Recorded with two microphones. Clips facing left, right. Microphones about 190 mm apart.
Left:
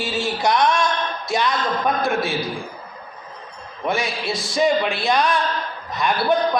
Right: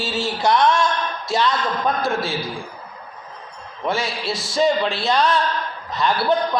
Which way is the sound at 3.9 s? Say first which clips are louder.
Even; 15° left (ahead or behind).